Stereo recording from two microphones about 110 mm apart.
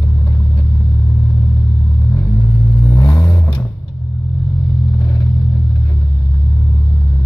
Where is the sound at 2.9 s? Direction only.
25° left (ahead or behind).